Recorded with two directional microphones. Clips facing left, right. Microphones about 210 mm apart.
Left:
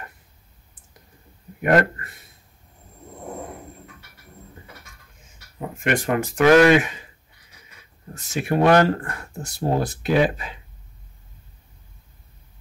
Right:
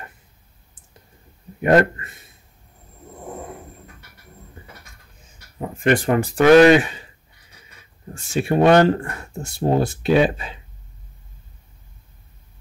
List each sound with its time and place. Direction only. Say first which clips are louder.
1.6 s speech: right 3 dB; 25° right (ahead or behind)
5.9 s speech: right 4 dB; 35° right (ahead or behind)
8.1 s speech: right 3 dB; 30° right (ahead or behind)